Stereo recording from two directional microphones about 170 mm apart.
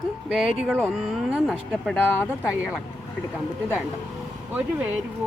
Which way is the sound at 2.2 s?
15° left (ahead or behind).